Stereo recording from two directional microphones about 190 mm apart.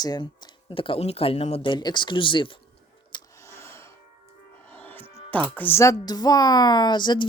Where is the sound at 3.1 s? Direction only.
15° left (ahead or behind).